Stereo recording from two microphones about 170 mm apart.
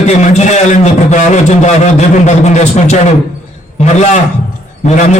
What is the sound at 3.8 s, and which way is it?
Speech, 45° left (ahead or behind).